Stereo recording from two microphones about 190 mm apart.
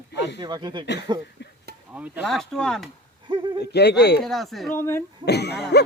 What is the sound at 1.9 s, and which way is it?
Speech, 5° right (ahead or behind).